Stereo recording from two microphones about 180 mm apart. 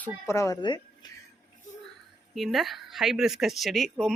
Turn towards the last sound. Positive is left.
turn(degrees=0)  # may be behind; listen again after turning